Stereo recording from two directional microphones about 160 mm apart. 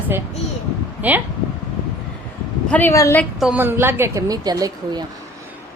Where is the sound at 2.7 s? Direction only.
15° left (ahead or behind).